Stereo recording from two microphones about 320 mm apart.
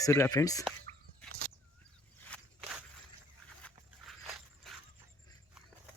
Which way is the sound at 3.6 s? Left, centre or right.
Centre.